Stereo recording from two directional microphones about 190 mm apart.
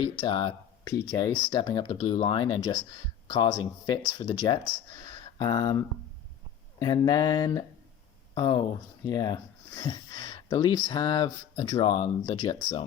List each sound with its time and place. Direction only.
0.0 s speech: 25° left (ahead or behind)